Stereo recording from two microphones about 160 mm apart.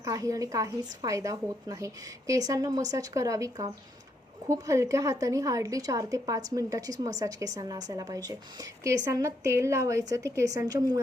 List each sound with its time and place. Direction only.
0.0 s a woman's voice: 20° right (ahead or behind)